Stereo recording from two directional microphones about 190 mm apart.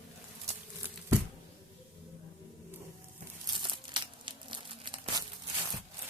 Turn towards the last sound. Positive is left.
turn(degrees=-25)  # may be behind; listen again after turning